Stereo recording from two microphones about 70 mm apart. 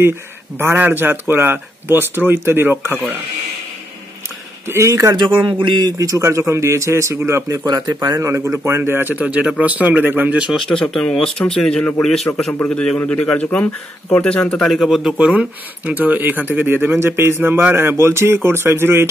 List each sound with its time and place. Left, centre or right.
0.6 s speech: right
4.6 s speech: right
6.2 s a man's voice: right
7.4 s speech: right
8.2 s speech: right
9.1 s speech: right
10.7 s speech: centre
14.7 s a man's voice: centre
15.1 s speech: centre; by 19.0 s right